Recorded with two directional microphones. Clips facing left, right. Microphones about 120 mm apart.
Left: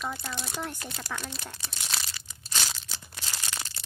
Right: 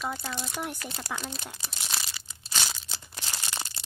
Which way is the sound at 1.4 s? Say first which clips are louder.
Even; 5° right (ahead or behind).